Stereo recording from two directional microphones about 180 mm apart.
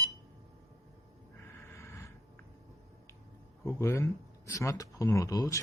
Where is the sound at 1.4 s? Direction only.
15° left (ahead or behind).